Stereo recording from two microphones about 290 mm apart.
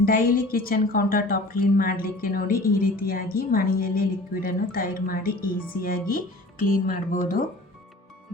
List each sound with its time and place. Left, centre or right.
0.0 s a woman's voice: left